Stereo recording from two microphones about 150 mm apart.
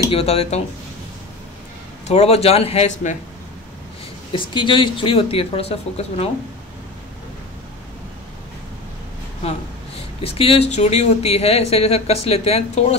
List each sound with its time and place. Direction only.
0.1 s speech: 40° left (ahead or behind)
2.0 s speech: 45° left (ahead or behind)
4.3 s speech: 35° left (ahead or behind)
9.9 s a sound: 40° left (ahead or behind)
10.7 s speech: 50° left (ahead or behind)